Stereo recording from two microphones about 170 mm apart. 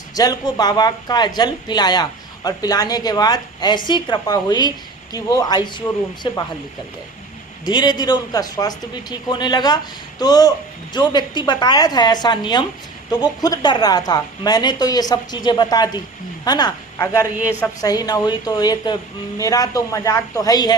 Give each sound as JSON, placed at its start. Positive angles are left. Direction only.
{"t": 0.2, "sound": "speech", "side_deg": 20}
{"t": 7.6, "sound": "speech", "side_deg": 25}
{"t": 17.3, "sound": "a woman's voice", "side_deg": -10}
{"t": 17.7, "sound": "speech", "side_deg": 20}